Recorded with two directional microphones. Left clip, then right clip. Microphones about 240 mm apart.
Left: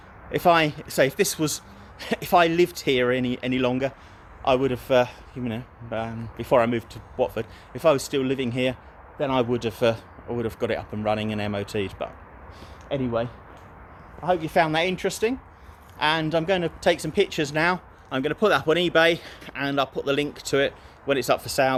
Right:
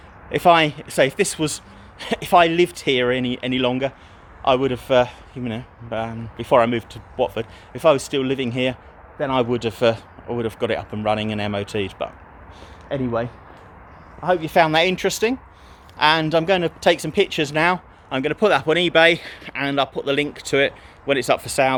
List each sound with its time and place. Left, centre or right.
0.3 s speech: centre